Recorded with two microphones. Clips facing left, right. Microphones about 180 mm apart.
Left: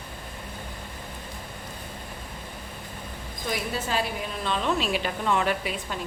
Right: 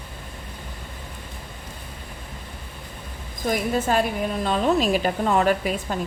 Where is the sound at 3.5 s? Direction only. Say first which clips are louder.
Right 7 dB; 50° right (ahead or behind).